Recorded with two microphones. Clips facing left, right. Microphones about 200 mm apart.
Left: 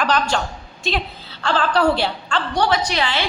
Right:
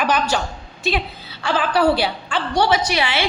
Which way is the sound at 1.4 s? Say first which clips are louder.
Even; 5° right (ahead or behind).